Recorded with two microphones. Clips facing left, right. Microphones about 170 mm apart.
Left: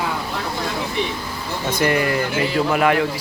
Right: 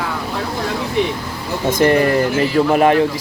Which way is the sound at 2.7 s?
25° right (ahead or behind).